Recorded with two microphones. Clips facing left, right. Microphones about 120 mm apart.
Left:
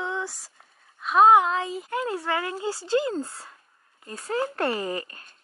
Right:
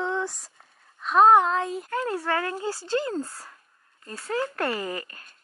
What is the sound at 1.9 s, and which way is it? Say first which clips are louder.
Speech: even; 15° left (ahead or behind).